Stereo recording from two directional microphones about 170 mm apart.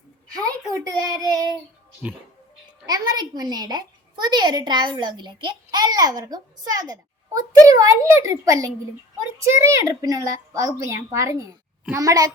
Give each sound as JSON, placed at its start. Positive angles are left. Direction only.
{"t": 0.4, "sound": "a child's voice", "side_deg": -20}
{"t": 2.8, "sound": "a woman's voice", "side_deg": -25}